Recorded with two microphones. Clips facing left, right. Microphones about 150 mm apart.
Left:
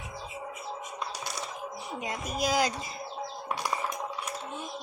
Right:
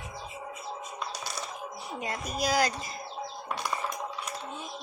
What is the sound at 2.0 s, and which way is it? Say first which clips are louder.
Speech: even; 15° left (ahead or behind).